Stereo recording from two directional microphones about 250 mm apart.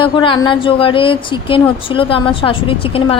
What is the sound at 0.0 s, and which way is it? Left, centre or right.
A woman's voice, centre.